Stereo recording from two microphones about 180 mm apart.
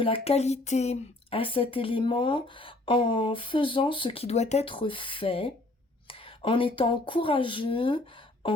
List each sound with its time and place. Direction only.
0.0 s speech: 30° left (ahead or behind)